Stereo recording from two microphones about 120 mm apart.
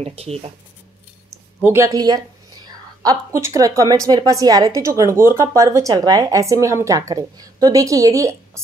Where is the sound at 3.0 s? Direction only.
25° right (ahead or behind).